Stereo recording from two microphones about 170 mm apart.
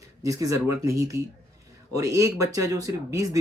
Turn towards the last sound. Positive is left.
turn(degrees=-20)  # may be behind; listen again after turning